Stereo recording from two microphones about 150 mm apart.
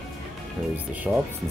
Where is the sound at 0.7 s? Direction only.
10° right (ahead or behind).